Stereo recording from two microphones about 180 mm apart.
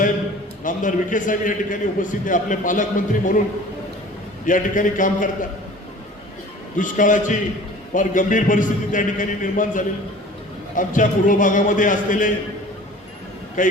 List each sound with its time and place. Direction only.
0.6 s a man's voice: 45° left (ahead or behind)
4.4 s a man's voice: 45° left (ahead or behind)
6.7 s a man's voice: 45° left (ahead or behind)
13.6 s a man's voice: 45° left (ahead or behind)